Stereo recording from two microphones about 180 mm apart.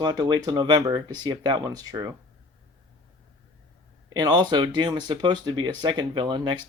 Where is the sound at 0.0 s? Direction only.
25° right (ahead or behind).